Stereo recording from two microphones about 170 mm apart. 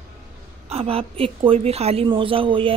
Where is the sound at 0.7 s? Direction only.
35° right (ahead or behind).